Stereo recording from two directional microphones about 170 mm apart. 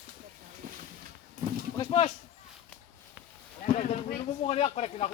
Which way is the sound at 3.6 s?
45° left (ahead or behind).